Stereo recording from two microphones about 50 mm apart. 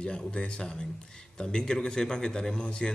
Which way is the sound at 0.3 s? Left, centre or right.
Centre.